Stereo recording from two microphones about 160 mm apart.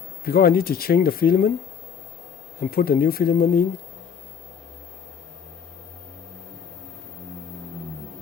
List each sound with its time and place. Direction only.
0.3 s speech: 70° left (ahead or behind)
2.6 s speech: 70° left (ahead or behind)